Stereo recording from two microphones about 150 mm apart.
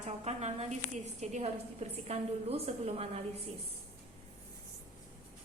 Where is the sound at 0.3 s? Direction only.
45° right (ahead or behind).